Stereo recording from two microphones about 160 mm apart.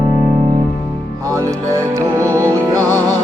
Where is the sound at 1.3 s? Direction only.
20° right (ahead or behind).